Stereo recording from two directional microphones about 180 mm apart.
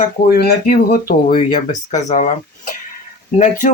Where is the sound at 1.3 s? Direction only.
35° left (ahead or behind).